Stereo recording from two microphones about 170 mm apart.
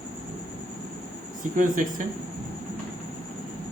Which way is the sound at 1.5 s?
50° right (ahead or behind).